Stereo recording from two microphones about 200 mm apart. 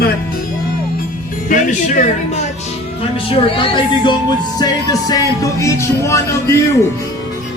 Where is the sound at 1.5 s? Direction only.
40° left (ahead or behind).